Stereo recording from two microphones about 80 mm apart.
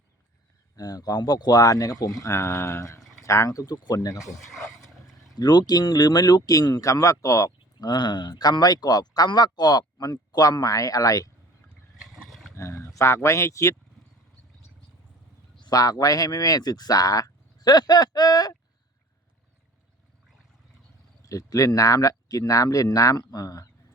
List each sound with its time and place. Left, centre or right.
0.8 s speech: left
2.2 s speech: left
4.5 s vehicle: centre
5.4 s speech: left
7.9 s speech: left
11.9 s wild animals: centre
12.3 s a sound: centre
12.5 s speech: left
15.6 s speech: left
21.2 s speech: left